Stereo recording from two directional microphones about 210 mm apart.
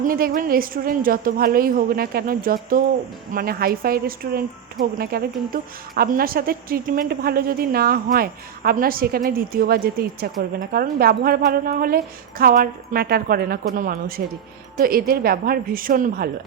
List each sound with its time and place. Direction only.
0.0 s a woman's voice: 45° right (ahead or behind)